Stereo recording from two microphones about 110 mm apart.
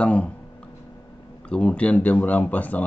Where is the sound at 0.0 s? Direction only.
10° left (ahead or behind).